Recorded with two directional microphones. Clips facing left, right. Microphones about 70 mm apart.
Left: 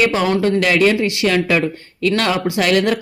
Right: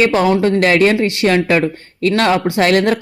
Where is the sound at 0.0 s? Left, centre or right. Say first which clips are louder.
Right 3 dB; right.